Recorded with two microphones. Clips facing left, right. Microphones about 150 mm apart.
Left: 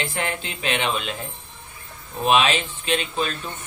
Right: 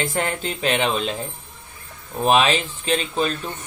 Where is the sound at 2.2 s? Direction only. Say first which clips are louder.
Right 2 dB; 40° right (ahead or behind).